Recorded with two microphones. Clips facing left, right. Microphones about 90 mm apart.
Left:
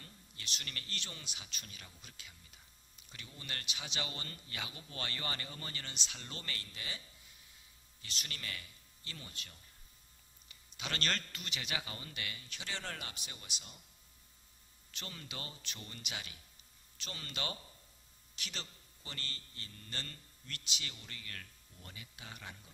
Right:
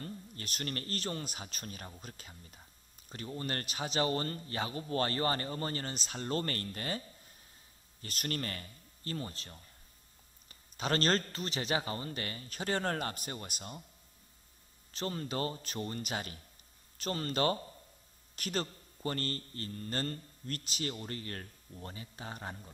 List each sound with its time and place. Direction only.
0.0 s a man's voice: 45° right (ahead or behind)
14.9 s speech: 40° right (ahead or behind)